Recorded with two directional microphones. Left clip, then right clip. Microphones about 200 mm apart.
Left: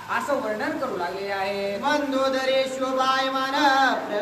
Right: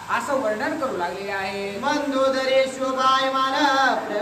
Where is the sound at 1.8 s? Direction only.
15° left (ahead or behind).